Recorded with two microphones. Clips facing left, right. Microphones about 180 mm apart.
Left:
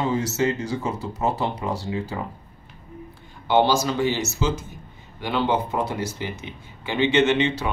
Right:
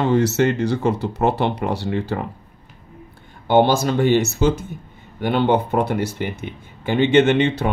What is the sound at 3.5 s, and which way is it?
Speech, 50° right (ahead or behind).